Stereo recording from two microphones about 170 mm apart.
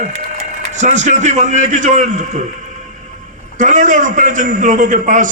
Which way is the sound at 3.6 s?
45° right (ahead or behind).